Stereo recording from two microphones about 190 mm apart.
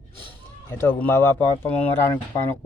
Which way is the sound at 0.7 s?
10° left (ahead or behind).